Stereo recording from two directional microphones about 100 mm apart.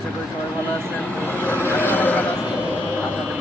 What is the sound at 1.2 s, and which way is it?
Speech, 20° left (ahead or behind).